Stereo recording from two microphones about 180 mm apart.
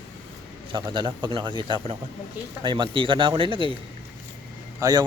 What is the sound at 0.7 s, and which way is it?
Speech, 25° right (ahead or behind).